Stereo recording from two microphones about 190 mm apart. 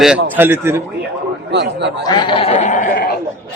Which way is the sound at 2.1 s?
25° left (ahead or behind).